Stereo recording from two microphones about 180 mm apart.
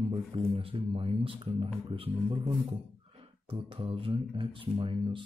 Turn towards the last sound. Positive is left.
turn(degrees=-30)  # may be behind; listen again after turning